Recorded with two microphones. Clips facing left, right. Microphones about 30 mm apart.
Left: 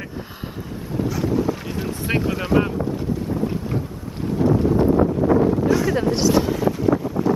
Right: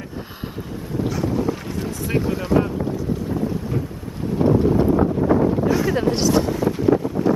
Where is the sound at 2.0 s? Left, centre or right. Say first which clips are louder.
Even; left.